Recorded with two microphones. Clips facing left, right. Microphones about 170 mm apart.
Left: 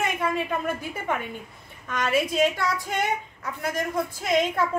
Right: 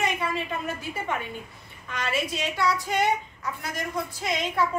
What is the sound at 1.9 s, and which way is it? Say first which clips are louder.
A woman's voice: left 5 dB; 45° left (ahead or behind).